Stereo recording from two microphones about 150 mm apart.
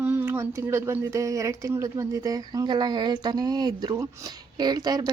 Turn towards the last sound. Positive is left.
turn(degrees=-25)  # may be behind; listen again after turning